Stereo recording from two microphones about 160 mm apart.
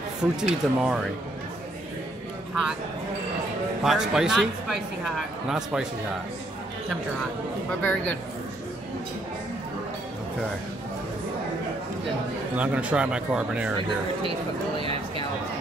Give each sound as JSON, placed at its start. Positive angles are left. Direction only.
{"t": 0.2, "sound": "speech", "side_deg": -5}
{"t": 3.8, "sound": "speech", "side_deg": -5}
{"t": 7.8, "sound": "speech", "side_deg": 10}
{"t": 12.5, "sound": "speech", "side_deg": -10}